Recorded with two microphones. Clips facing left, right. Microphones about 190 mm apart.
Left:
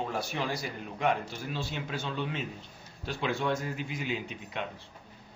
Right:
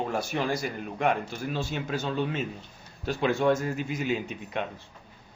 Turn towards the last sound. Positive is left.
turn(degrees=-45)  # may be behind; listen again after turning